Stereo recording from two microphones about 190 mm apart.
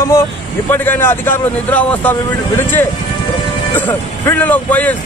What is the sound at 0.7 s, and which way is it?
Speech, 10° left (ahead or behind).